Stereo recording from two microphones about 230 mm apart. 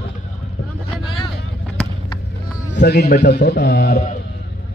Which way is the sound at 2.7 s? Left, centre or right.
Left.